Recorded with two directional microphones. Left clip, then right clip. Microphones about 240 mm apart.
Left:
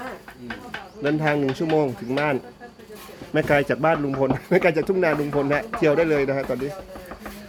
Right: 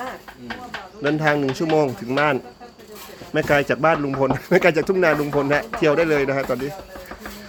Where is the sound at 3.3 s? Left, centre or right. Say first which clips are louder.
Right 1 dB; centre.